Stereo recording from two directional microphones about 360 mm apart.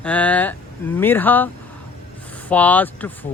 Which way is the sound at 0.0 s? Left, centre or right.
Centre.